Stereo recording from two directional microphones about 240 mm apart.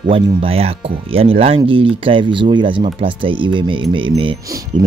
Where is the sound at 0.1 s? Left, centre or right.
Right.